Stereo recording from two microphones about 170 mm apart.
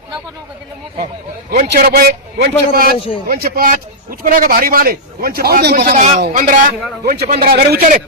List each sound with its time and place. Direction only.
1.5 s a man's voice: 70° right (ahead or behind)
5.9 s a man's voice: 50° right (ahead or behind)
7.0 s a man's voice: 70° right (ahead or behind)